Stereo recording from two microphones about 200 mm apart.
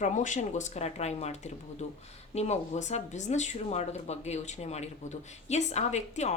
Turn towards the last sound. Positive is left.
turn(degrees=35)  # may be behind; listen again after turning